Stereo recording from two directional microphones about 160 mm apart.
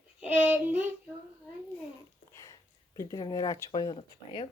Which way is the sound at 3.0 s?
25° left (ahead or behind).